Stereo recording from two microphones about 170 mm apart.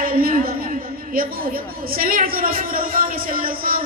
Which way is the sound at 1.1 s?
60° right (ahead or behind).